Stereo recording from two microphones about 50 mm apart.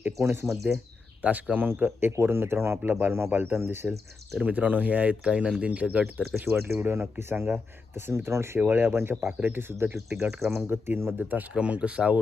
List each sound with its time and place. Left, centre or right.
0.0 s speech: right
1.2 s speech: right
1.7 s speech: right
4.4 s speech: right
6.4 s speech: right
6.9 s speech: right
11.5 s speech: right